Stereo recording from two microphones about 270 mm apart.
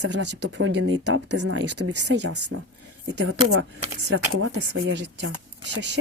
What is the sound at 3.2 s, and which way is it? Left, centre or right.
Speech, right.